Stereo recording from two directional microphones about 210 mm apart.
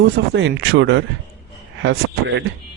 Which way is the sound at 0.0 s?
60° right (ahead or behind).